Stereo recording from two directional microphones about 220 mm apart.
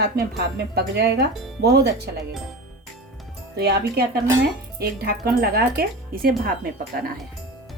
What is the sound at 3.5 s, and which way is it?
Speech, 50° right (ahead or behind).